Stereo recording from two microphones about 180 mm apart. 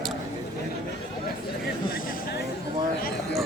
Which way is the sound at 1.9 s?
50° left (ahead or behind).